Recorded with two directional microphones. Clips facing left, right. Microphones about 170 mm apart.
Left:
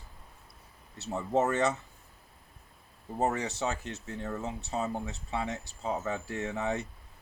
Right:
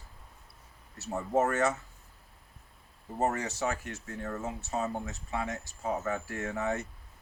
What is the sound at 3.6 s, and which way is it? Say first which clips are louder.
Speech: even; 20° left (ahead or behind).